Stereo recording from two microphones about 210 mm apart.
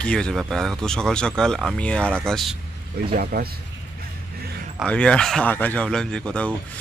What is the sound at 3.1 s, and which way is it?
Speech, 45° right (ahead or behind).